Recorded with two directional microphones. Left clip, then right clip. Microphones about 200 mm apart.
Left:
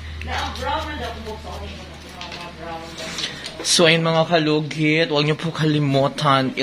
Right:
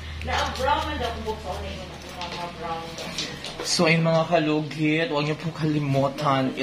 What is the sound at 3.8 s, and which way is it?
Speech, 40° left (ahead or behind).